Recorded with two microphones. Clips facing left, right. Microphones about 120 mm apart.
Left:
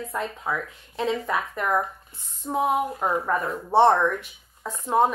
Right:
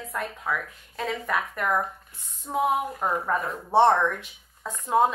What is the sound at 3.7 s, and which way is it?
Speech, 15° left (ahead or behind).